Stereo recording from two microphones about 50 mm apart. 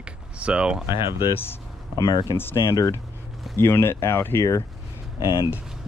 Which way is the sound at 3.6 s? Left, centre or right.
Left.